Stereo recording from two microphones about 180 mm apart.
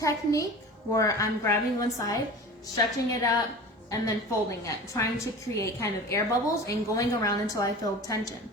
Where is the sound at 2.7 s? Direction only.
20° left (ahead or behind).